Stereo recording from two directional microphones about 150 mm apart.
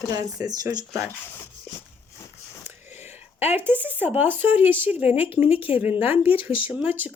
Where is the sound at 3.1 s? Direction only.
15° right (ahead or behind).